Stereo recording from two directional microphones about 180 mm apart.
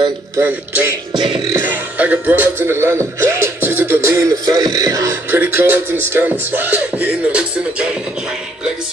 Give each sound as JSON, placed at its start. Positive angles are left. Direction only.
{"t": 0.4, "sound": "speech", "side_deg": -10}
{"t": 1.1, "sound": "music", "side_deg": -25}
{"t": 1.5, "sound": "speech", "side_deg": -10}